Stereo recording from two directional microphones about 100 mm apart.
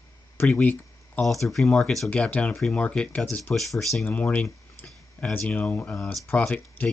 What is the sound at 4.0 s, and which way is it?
Speech, 15° left (ahead or behind).